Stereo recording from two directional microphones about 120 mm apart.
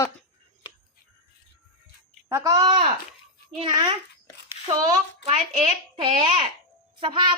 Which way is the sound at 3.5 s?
50° right (ahead or behind).